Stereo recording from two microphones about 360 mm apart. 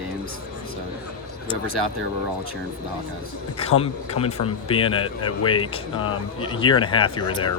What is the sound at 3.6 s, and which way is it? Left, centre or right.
Speech, centre.